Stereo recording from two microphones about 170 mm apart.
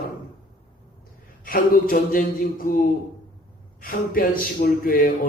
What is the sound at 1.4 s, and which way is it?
A man's voice, 55° left (ahead or behind).